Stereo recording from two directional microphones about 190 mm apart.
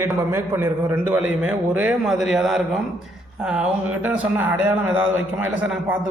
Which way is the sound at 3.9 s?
5° right (ahead or behind).